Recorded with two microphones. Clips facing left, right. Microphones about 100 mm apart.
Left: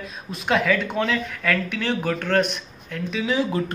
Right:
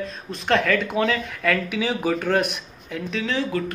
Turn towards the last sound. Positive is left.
turn(degrees=5)  # may be behind; listen again after turning